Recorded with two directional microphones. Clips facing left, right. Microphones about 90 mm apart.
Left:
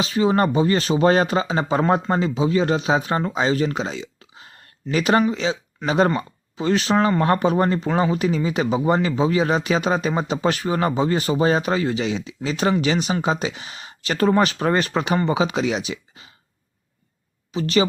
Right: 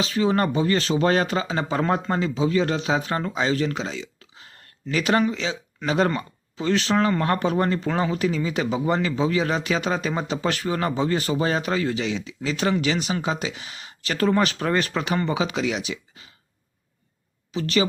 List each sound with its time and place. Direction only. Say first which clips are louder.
0.0 s speech: left 3 dB; 20° left (ahead or behind)
17.5 s speech: left 3 dB; 25° left (ahead or behind)